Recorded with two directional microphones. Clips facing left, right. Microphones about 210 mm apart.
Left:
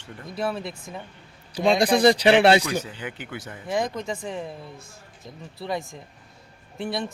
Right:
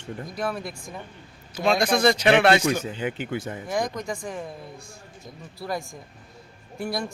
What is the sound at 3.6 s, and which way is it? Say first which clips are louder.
Speech: left 4 dB; 25° left (ahead or behind).